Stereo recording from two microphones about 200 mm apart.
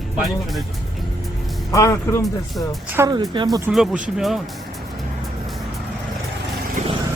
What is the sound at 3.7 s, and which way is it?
Speech, 5° right (ahead or behind).